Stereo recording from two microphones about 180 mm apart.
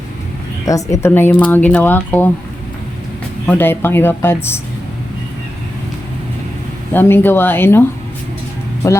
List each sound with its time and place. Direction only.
0.6 s speech: 20° left (ahead or behind)
3.4 s speech: 10° left (ahead or behind)
6.9 s speech: 10° left (ahead or behind)